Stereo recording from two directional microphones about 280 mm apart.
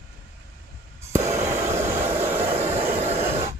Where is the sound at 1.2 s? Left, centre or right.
Centre.